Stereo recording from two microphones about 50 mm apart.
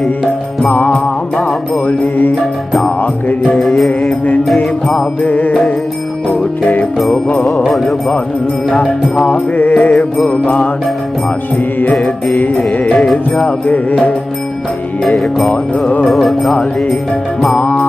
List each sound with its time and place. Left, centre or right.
0.2 s music: centre
0.7 s music: left
1.9 s music: left
3.4 s music: centre
5.2 s music: left
6.6 s music: left
7.6 s music: centre
9.2 s mantra: left
10.3 s music: left
11.9 s music: centre
12.4 s mantra: left
12.8 s music: centre
13.7 s music: left
15.0 s music: centre